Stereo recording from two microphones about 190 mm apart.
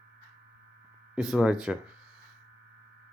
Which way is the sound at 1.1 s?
5° right (ahead or behind).